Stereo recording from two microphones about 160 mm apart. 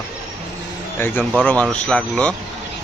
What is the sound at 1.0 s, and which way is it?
A man's voice, 10° left (ahead or behind).